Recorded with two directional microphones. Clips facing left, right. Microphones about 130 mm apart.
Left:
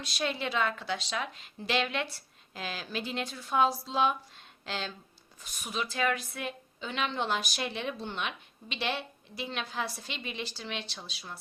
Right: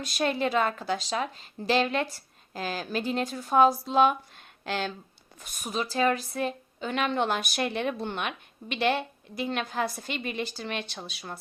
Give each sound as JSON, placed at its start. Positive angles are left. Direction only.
{"t": 0.0, "sound": "speech", "side_deg": -50}